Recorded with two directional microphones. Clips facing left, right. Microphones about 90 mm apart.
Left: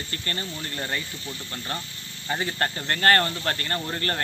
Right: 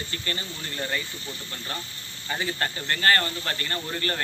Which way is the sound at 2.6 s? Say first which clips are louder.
Left 3 dB; 50° left (ahead or behind).